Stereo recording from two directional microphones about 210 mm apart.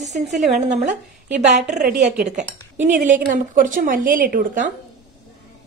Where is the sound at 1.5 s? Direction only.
35° right (ahead or behind).